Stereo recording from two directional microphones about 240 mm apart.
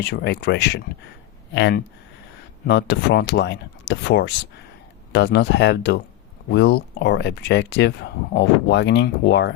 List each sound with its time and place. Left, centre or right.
0.0 s speech: left